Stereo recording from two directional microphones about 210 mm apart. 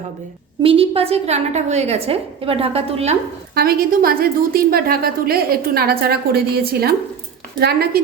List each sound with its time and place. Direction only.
0.6 s a woman's voice: 25° right (ahead or behind)
3.5 s a woman's voice: 45° right (ahead or behind)